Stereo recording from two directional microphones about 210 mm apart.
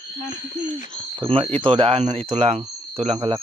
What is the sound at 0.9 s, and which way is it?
Speech, 25° right (ahead or behind).